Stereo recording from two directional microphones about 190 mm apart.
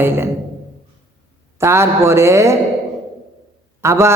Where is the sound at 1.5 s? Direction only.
15° right (ahead or behind).